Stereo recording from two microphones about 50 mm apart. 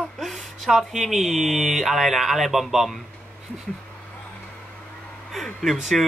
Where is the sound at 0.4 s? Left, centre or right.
Centre.